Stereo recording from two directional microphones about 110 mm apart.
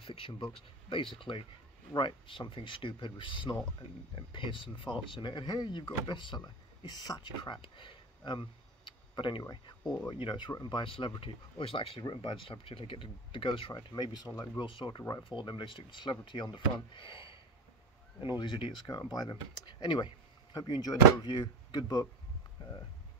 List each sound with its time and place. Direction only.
0.0 s speech: 55° left (ahead or behind)
8.3 s a sound: 45° left (ahead or behind)
9.4 s speech: 40° left (ahead or behind)